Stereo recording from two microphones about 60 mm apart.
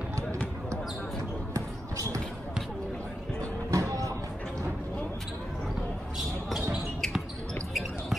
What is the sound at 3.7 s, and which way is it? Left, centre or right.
Music, right.